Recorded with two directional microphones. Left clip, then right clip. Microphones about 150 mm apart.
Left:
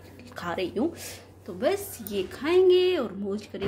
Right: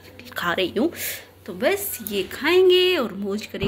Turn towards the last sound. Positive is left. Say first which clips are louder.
# right 5 dB
turn(degrees=0)  # may be behind; listen again after turning